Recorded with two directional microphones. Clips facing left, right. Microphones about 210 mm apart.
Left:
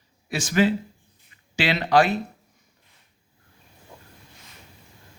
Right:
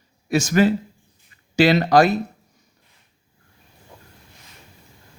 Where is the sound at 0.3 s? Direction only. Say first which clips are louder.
Right 4 dB; 45° right (ahead or behind).